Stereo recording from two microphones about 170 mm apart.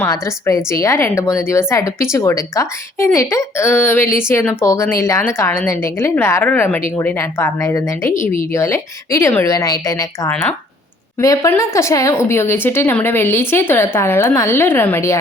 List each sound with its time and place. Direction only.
0.0 s a woman's voice: 15° left (ahead or behind)
8.1 s speech: 50° left (ahead or behind)
8.5 s a woman's voice: 15° left (ahead or behind)